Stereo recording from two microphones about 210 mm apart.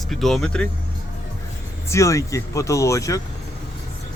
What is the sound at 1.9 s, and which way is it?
Speech, 15° left (ahead or behind).